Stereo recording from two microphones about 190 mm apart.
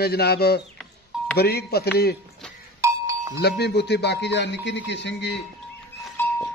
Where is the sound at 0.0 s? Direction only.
55° left (ahead or behind).